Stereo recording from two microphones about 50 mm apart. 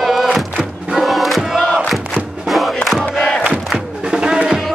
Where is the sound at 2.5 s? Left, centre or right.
Centre.